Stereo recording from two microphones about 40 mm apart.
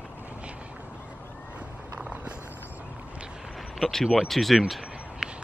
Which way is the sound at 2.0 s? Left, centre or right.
Right.